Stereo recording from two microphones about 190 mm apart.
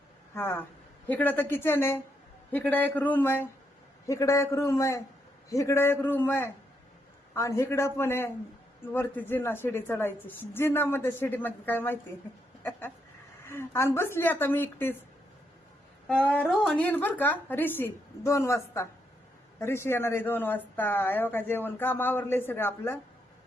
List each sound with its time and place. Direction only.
0.3 s a woman's voice: 10° left (ahead or behind)
13.5 s a woman's voice: 15° left (ahead or behind)
16.0 s a woman's voice: 5° left (ahead or behind)